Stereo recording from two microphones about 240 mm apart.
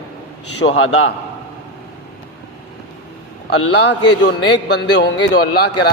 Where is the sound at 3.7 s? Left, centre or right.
Left.